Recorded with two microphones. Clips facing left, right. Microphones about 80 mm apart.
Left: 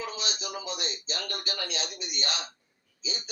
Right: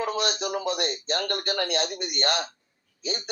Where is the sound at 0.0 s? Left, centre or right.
Right.